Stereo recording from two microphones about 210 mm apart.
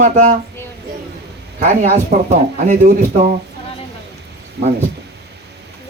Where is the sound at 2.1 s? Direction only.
45° right (ahead or behind).